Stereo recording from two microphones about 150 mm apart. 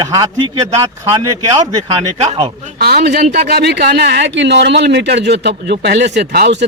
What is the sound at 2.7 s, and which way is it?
A man's voice, 90° right.